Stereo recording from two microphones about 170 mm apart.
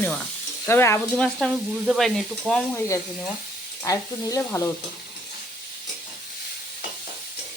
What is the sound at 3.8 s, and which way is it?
Stir, 20° left (ahead or behind).